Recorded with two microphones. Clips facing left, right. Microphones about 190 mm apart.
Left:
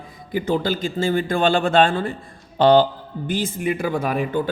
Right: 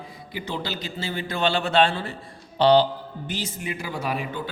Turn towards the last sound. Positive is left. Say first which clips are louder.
# left 7 dB
turn(degrees=50)  # may be behind; listen again after turning